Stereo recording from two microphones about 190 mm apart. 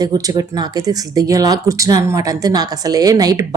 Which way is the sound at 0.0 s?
20° right (ahead or behind).